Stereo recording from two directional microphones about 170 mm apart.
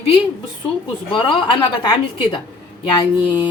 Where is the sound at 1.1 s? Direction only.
30° left (ahead or behind).